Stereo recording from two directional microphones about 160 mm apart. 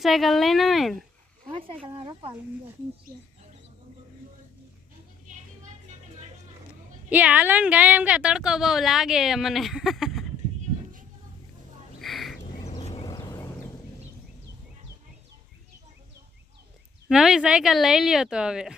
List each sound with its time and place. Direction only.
0.0 s a woman's voice: centre (ahead or behind)
1.5 s speech: 35° right (ahead or behind)
7.1 s a woman's voice: 10° right (ahead or behind)
11.9 s a sound: centre (ahead or behind)
13.1 s a sound: 25° left (ahead or behind)
17.1 s a woman's voice: 5° right (ahead or behind)